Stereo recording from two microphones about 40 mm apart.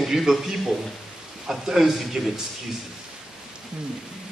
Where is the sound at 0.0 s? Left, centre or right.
Centre.